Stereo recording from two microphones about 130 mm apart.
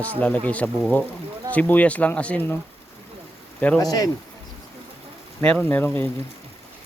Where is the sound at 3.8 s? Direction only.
30° left (ahead or behind).